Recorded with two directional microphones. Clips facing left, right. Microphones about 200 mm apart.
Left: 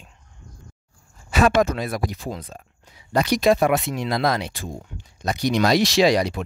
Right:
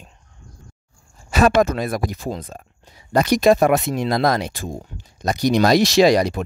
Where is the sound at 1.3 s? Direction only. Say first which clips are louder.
Right 2 dB; 40° right (ahead or behind).